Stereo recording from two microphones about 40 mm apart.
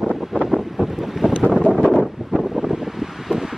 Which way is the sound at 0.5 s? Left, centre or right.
Centre.